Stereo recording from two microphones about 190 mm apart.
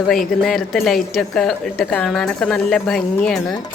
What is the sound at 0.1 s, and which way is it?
Speech, centre (ahead or behind).